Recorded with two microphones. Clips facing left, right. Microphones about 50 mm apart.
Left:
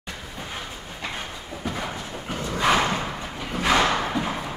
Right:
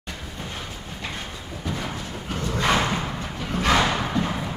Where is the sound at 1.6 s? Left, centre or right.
Centre.